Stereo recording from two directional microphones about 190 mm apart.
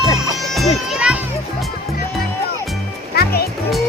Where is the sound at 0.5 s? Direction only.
Centre (ahead or behind).